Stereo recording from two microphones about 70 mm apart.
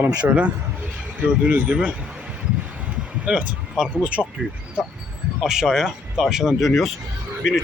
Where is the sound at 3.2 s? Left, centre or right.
Centre.